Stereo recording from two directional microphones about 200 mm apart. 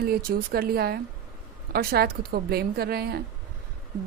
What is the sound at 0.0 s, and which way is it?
Speech, 50° right (ahead or behind).